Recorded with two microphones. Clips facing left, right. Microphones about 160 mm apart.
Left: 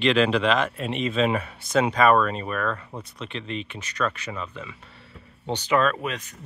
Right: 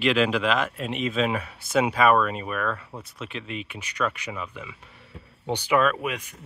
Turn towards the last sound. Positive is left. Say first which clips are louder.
# even
turn(degrees=-10)  # may be behind; listen again after turning